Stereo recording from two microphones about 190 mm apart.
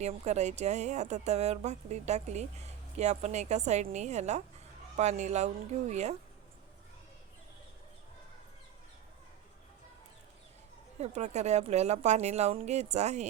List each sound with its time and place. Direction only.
0.0 s a woman's voice: 35° right (ahead or behind)
11.0 s a woman's voice: 35° right (ahead or behind)